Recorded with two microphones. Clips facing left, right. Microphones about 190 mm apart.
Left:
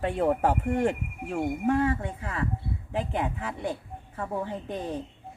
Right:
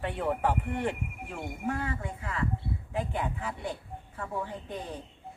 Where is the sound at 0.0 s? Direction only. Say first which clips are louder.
Left 5 dB; 40° left (ahead or behind).